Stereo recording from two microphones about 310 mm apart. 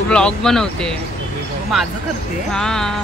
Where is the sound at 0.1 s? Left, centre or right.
Centre.